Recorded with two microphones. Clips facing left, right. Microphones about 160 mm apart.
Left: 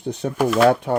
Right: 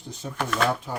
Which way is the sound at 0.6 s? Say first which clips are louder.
Left 10 dB; 70° left (ahead or behind).